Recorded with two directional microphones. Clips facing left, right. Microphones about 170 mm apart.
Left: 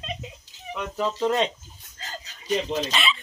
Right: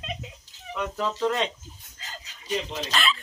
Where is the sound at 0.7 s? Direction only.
15° left (ahead or behind).